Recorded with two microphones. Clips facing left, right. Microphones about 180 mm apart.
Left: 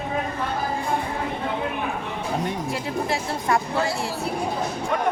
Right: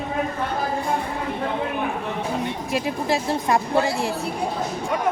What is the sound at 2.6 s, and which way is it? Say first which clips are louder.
A woman's voice: right 3 dB; 20° right (ahead or behind).